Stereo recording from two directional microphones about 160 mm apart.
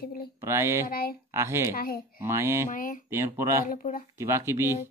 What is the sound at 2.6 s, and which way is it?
Speech, 55° left (ahead or behind).